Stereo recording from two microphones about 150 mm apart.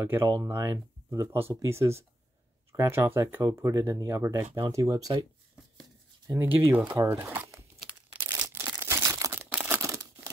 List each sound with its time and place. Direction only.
0.0 s speech: 20° right (ahead or behind)
6.2 s speech: 15° right (ahead or behind)
7.3 s crumpling: 20° right (ahead or behind)
8.2 s a sound: 15° right (ahead or behind)
8.7 s crumpling: 20° right (ahead or behind)